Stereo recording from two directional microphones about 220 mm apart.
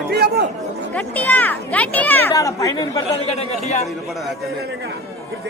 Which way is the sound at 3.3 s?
30° left (ahead or behind).